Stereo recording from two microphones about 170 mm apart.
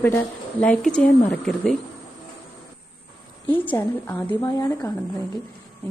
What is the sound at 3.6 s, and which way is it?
Speech, 10° left (ahead or behind).